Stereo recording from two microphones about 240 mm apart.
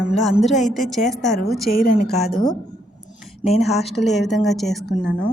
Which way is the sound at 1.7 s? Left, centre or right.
Left.